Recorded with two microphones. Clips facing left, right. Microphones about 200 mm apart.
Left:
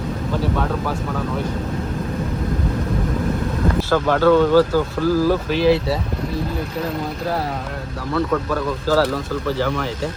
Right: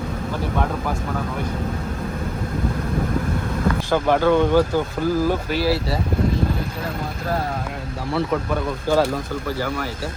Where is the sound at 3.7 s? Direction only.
15° right (ahead or behind).